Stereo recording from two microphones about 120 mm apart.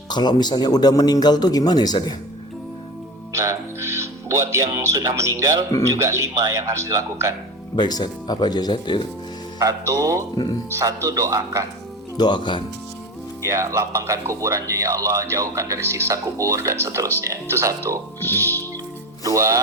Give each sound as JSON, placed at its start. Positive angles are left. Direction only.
{"t": 0.1, "sound": "a man's voice", "side_deg": 35}
{"t": 3.3, "sound": "speech", "side_deg": -25}
{"t": 7.8, "sound": "a man's voice", "side_deg": 35}
{"t": 9.6, "sound": "speech", "side_deg": -30}
{"t": 10.3, "sound": "a man's voice", "side_deg": 35}
{"t": 10.7, "sound": "speech", "side_deg": -25}
{"t": 12.1, "sound": "a man's voice", "side_deg": 40}
{"t": 13.4, "sound": "speech", "side_deg": -25}
{"t": 19.2, "sound": "speech", "side_deg": -25}